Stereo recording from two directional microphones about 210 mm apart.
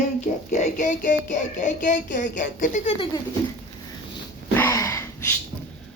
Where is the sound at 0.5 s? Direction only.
35° left (ahead or behind).